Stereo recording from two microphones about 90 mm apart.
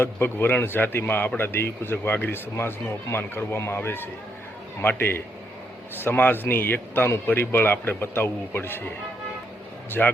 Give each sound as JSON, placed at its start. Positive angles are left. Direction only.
{"t": 0.0, "sound": "speech", "side_deg": 25}
{"t": 10.0, "sound": "speech", "side_deg": 15}